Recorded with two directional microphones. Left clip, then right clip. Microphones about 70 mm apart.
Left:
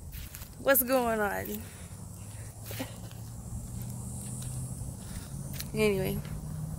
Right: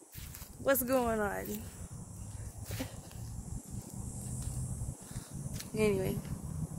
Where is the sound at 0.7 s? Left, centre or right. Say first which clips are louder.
Left 4 dB; right.